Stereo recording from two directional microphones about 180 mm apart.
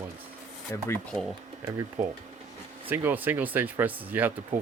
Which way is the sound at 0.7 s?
15° left (ahead or behind).